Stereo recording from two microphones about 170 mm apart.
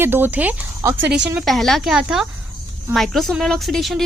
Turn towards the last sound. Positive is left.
turn(degrees=0)  # may be behind; listen again after turning